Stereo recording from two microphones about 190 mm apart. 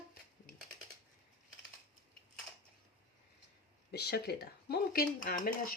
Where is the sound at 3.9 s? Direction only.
60° left (ahead or behind).